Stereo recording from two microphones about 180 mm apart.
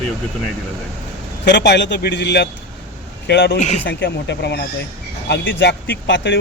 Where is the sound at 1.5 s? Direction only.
70° left (ahead or behind).